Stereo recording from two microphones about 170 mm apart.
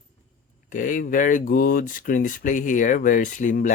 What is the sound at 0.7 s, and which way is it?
Speech, 50° left (ahead or behind).